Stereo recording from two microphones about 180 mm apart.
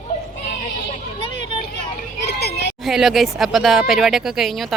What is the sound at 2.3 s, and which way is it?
Speech, 65° left (ahead or behind).